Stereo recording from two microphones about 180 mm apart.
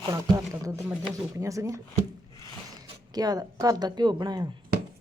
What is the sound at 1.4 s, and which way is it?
Speech, 15° right (ahead or behind).